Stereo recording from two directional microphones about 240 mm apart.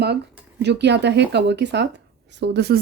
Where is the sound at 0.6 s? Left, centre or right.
Right.